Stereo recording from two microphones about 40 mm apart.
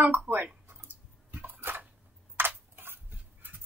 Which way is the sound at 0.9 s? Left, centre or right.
Right.